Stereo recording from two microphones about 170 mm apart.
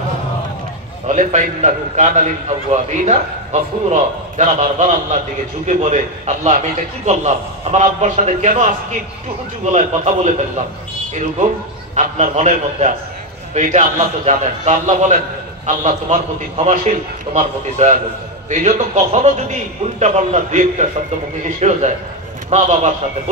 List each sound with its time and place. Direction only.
1.0 s a man's voice: 45° right (ahead or behind)
9.7 s a man's voice: 45° right (ahead or behind)
11.9 s a man's voice: 45° right (ahead or behind)